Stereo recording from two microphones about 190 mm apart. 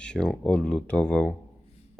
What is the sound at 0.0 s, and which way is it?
Speech, 5° left (ahead or behind).